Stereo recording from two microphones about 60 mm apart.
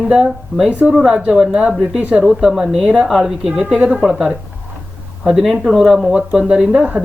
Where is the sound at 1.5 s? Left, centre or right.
Centre.